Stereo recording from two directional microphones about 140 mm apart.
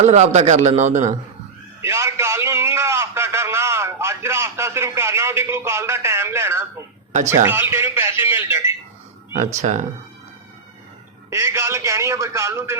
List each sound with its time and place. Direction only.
0.0 s a man's voice: 55° right (ahead or behind)
1.8 s a man's voice: 20° right (ahead or behind)
9.6 s speech: 55° right (ahead or behind)
11.3 s a man's voice: 20° right (ahead or behind)